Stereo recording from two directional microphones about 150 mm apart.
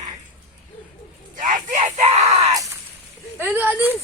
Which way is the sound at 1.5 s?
50° right (ahead or behind).